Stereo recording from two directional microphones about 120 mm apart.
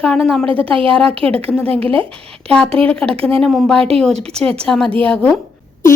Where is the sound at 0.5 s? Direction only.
50° right (ahead or behind).